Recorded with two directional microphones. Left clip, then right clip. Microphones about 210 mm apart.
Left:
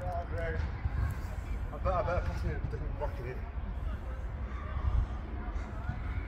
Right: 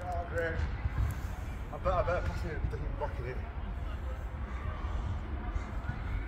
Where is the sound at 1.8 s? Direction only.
20° right (ahead or behind).